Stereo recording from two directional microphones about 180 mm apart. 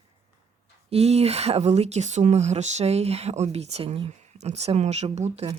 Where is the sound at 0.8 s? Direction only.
35° right (ahead or behind).